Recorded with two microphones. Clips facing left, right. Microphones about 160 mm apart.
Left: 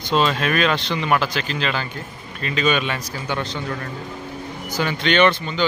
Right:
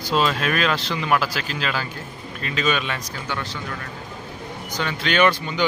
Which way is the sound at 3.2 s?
20° left (ahead or behind).